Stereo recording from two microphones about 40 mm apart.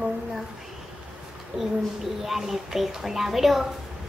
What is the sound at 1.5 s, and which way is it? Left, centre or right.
Speech, right.